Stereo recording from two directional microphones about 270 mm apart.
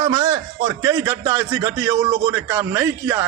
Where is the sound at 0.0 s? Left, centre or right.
Centre.